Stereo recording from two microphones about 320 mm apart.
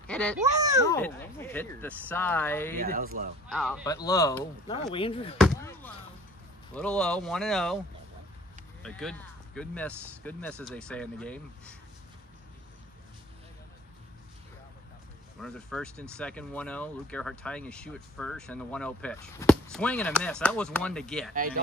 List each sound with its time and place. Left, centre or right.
0.0 s a sound: centre
0.4 s a child's voice: centre
0.8 s speech: centre
2.8 s speech: right
3.4 s speech: centre
5.4 s basketball bounce: centre
6.7 s speech: centre
8.8 s speech: centre
15.4 s speech: centre